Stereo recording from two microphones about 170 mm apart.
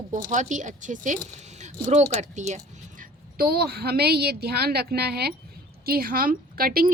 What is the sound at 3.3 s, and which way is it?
A woman's voice, 60° right (ahead or behind).